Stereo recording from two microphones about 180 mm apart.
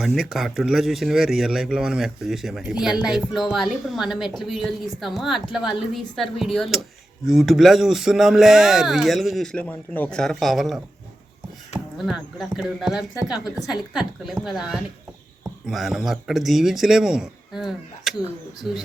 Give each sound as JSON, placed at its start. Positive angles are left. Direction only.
{"t": 0.0, "sound": "speech", "side_deg": 0}